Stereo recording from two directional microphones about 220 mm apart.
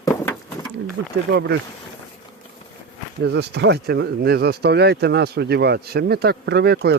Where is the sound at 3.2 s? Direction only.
50° right (ahead or behind).